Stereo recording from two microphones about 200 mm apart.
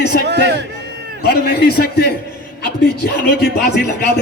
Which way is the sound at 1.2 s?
50° left (ahead or behind).